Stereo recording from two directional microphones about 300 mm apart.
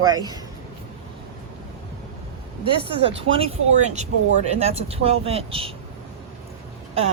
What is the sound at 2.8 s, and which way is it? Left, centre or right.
Speech, right.